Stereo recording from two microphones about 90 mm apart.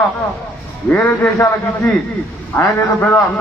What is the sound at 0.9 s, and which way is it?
Speech, 20° left (ahead or behind).